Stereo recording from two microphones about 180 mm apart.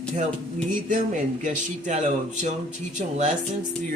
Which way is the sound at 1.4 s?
40° right (ahead or behind).